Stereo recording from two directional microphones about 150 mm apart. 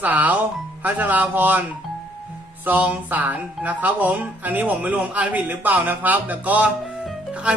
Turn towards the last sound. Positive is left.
turn(degrees=-5)  # may be behind; listen again after turning